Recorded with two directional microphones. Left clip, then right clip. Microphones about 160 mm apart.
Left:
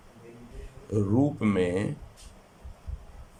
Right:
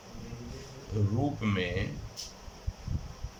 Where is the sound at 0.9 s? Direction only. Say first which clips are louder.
Left 7 dB; 50° left (ahead or behind).